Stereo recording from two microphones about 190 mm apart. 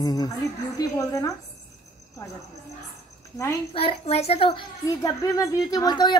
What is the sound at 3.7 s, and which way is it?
A child's voice, 30° left (ahead or behind).